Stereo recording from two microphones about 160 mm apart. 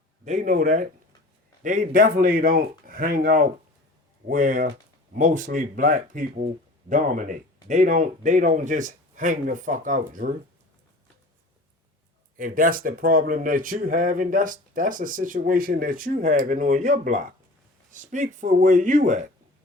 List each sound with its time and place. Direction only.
0.3 s speech: 50° right (ahead or behind)
12.4 s speech: 60° right (ahead or behind)